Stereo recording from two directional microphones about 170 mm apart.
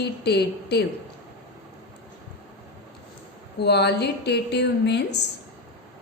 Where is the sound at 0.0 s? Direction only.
75° left (ahead or behind).